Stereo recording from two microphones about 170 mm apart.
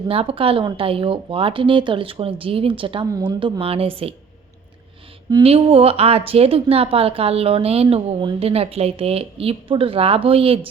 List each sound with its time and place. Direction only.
0.1 s speech: 35° right (ahead or behind)
5.4 s speech: 35° right (ahead or behind)